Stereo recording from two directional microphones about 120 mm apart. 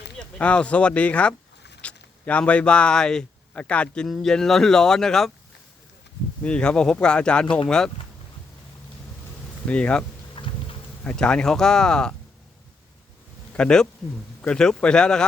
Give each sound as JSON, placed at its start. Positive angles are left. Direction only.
{"t": 0.2, "sound": "speech", "side_deg": 10}
{"t": 6.4, "sound": "speech", "side_deg": 10}
{"t": 9.6, "sound": "speech", "side_deg": 10}
{"t": 10.3, "sound": "a sound", "side_deg": 45}
{"t": 11.0, "sound": "speech", "side_deg": 5}
{"t": 13.6, "sound": "speech", "side_deg": 5}